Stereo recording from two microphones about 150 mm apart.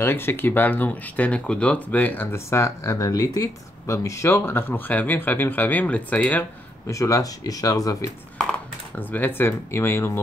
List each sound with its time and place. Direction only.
0.0 s speech: 15° left (ahead or behind)
8.9 s speech: 10° left (ahead or behind)